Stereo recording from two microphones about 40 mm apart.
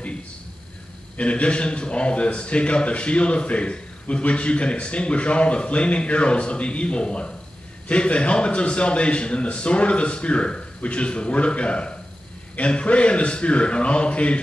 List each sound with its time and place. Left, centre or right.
1.1 s a man's voice: left